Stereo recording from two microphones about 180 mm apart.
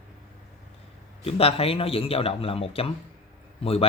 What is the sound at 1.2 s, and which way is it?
Speech, 35° left (ahead or behind).